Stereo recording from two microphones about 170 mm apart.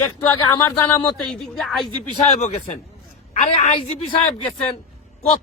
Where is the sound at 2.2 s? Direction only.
40° left (ahead or behind).